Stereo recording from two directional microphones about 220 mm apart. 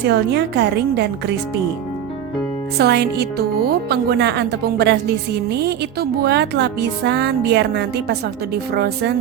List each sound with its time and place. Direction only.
0.0 s speech: 50° right (ahead or behind)
2.7 s speech: 50° right (ahead or behind)